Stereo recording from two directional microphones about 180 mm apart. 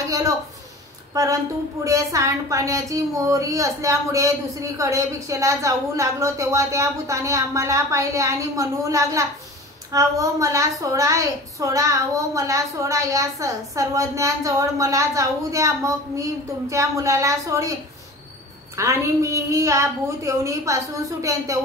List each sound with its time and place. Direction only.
1.9 s a woman's voice: 15° right (ahead or behind)
18.8 s a woman's voice: 15° right (ahead or behind)